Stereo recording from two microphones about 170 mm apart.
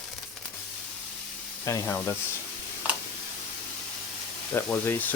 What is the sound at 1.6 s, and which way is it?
Speech, 20° left (ahead or behind).